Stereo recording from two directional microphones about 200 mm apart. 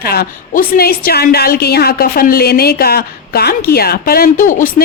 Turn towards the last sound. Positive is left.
turn(degrees=40)  # may be behind; listen again after turning